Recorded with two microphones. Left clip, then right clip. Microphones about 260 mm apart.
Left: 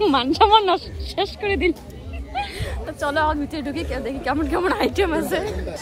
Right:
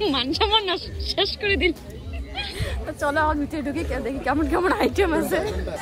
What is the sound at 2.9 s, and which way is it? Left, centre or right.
A woman's voice, centre.